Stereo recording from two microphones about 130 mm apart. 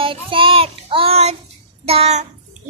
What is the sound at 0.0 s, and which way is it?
Child singing, 40° right (ahead or behind).